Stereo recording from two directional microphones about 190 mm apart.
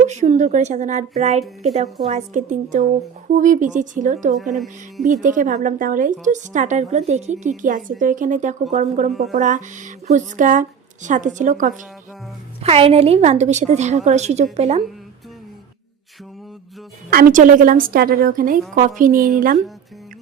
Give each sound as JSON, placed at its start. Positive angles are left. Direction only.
{"t": 0.0, "sound": "a woman's voice", "side_deg": -40}
{"t": 4.5, "sound": "speech", "side_deg": 0}
{"t": 5.0, "sound": "a woman's voice", "side_deg": -40}
{"t": 12.6, "sound": "a woman's voice", "side_deg": -30}
{"t": 17.1, "sound": "speech", "side_deg": -50}